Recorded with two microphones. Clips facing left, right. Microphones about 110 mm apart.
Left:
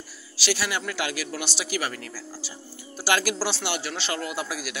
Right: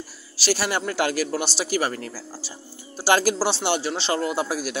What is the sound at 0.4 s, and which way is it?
Speech, 40° right (ahead or behind).